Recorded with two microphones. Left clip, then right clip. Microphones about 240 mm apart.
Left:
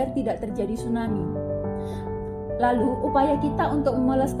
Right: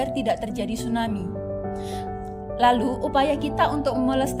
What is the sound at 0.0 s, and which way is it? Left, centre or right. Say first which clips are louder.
Speech: right 2 dB; right.